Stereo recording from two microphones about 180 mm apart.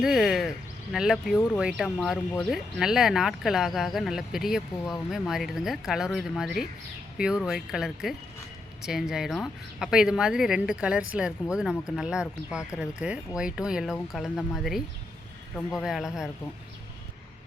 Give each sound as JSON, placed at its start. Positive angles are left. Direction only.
{"t": 0.0, "sound": "speech", "side_deg": 0}